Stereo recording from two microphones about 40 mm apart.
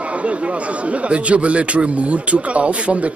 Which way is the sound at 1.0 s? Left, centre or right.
Right.